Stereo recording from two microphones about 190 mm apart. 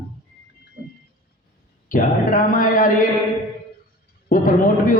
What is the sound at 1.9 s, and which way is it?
A man's voice, 45° left (ahead or behind).